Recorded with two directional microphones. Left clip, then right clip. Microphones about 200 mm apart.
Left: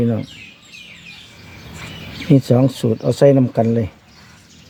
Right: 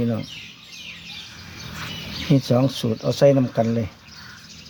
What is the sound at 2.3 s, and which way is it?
Speech, 45° left (ahead or behind).